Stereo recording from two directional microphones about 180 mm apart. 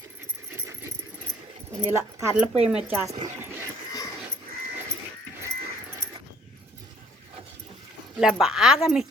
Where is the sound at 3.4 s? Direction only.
15° right (ahead or behind).